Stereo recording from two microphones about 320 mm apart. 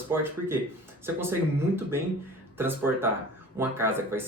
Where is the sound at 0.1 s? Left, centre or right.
Centre.